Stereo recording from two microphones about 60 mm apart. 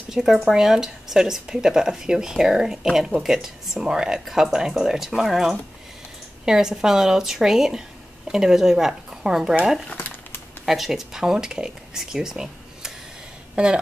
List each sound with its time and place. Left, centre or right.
0.1 s speech: centre
10.6 s speech: centre